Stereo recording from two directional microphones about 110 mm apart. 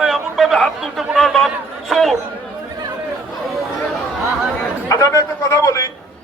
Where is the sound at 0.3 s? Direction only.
Centre (ahead or behind).